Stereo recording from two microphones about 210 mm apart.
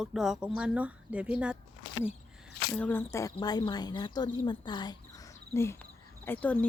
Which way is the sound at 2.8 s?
10° left (ahead or behind).